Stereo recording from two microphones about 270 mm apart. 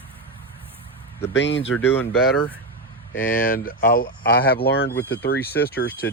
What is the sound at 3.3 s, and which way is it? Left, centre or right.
Speech, left.